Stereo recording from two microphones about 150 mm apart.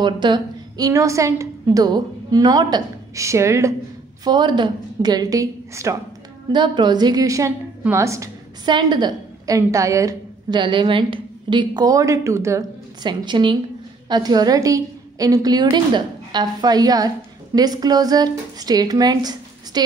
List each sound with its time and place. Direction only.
0.0 s a woman's voice: 30° right (ahead or behind)
13.1 s a woman's voice: 30° right (ahead or behind)